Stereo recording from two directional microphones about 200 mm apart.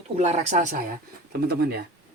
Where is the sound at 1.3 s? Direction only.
55° right (ahead or behind).